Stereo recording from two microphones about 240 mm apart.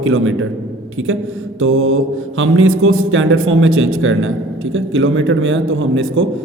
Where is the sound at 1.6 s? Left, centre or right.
Right.